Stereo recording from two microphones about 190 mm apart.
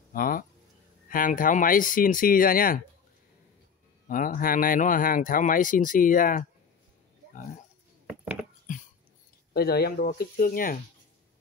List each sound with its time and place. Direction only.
0.1 s speech: 50° left (ahead or behind)
4.1 s speech: 45° left (ahead or behind)
8.7 s a sound: 40° left (ahead or behind)
9.5 s speech: 55° left (ahead or behind)